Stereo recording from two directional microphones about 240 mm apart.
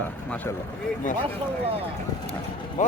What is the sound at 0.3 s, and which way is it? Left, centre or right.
Speech, centre.